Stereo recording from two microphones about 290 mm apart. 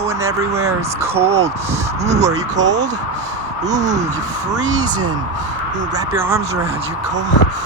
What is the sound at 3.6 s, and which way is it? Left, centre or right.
Speech, right.